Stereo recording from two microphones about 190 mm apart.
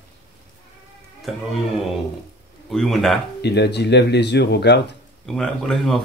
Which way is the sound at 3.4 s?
60° left (ahead or behind).